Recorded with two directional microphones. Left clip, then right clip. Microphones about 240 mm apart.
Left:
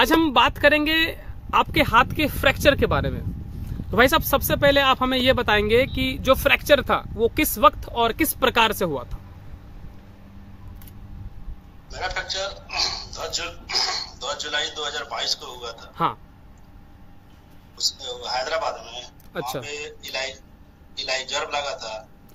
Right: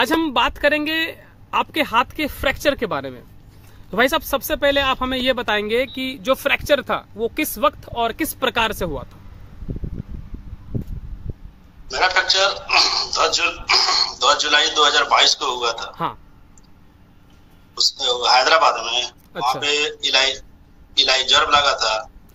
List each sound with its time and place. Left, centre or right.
0.0 s speech: centre
11.9 s a man's voice: right
17.7 s a man's voice: right